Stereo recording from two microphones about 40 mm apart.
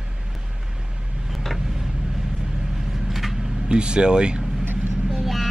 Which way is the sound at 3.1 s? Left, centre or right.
Centre.